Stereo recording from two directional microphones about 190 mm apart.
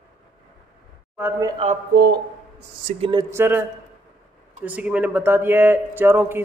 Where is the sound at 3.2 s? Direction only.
10° right (ahead or behind).